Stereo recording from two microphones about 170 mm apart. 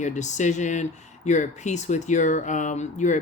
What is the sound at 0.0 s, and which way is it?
Speech, 45° left (ahead or behind).